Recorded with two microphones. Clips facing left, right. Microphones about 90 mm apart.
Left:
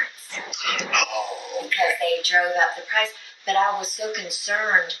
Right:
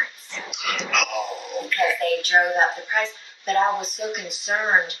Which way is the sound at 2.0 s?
40° right (ahead or behind).